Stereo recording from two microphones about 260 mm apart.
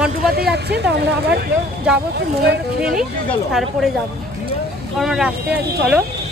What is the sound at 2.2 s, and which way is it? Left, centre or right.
Speech, right.